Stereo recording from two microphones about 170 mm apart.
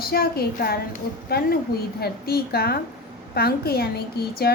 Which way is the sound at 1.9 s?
65° left (ahead or behind).